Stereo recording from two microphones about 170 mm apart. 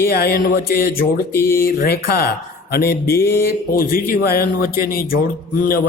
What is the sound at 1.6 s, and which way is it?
A man's voice, 65° left (ahead or behind).